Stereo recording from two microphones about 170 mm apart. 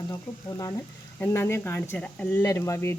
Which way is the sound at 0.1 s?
20° left (ahead or behind).